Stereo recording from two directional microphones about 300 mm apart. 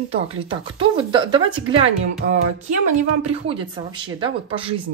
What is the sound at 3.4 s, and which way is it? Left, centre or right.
Speech, centre.